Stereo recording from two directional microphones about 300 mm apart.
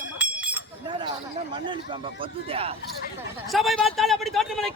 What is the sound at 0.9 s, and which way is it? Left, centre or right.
Chink, centre.